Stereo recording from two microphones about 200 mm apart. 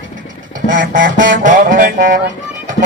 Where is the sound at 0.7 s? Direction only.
70° right (ahead or behind).